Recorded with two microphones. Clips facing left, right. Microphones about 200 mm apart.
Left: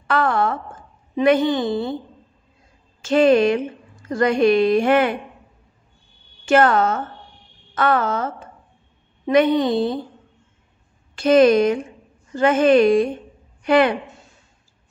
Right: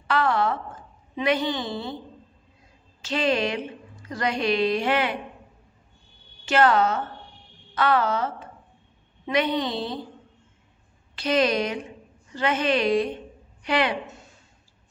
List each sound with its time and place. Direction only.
0.0 s a woman's voice: 50° left (ahead or behind)
3.0 s a woman's voice: 50° left (ahead or behind)
6.4 s a woman's voice: 50° left (ahead or behind)
11.1 s a woman's voice: 50° left (ahead or behind)